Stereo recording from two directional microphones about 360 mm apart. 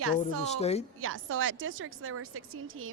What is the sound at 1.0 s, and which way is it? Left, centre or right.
A woman's voice, right.